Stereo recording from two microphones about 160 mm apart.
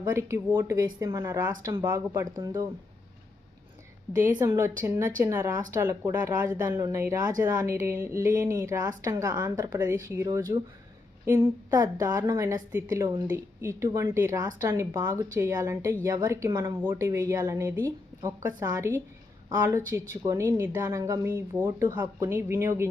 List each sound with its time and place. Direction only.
0.0 s speech: 15° right (ahead or behind)
4.4 s a woman's voice: 20° right (ahead or behind)